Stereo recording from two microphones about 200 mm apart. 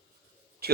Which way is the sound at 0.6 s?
50° right (ahead or behind).